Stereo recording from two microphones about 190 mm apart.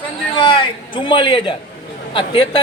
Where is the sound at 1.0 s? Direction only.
25° left (ahead or behind).